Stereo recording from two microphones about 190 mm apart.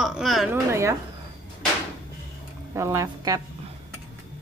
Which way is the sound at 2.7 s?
15° right (ahead or behind).